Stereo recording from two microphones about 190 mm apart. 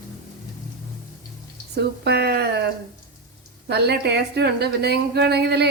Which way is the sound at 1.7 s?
60° right (ahead or behind).